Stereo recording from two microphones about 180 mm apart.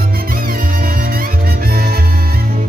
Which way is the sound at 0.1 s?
55° right (ahead or behind).